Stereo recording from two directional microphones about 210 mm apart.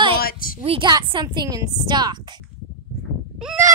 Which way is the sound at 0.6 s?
25° right (ahead or behind).